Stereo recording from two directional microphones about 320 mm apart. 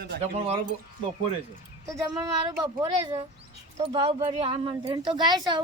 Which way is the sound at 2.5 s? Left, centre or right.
Centre.